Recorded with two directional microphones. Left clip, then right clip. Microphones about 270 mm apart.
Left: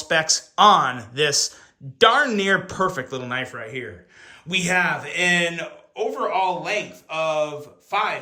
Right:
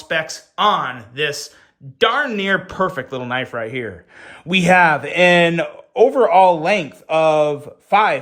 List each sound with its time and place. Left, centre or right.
0.0 s speech: centre; by 8.2 s right